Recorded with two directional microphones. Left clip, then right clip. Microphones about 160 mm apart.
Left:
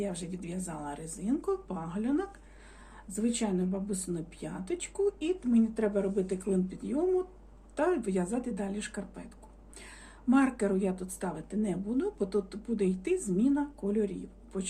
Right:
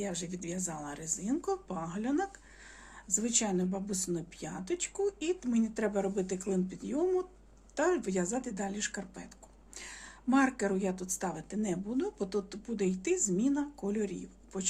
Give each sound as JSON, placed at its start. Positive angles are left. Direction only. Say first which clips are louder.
{"t": 0.0, "sound": "a woman's voice", "louder": "left 1 dB", "side_deg": -30}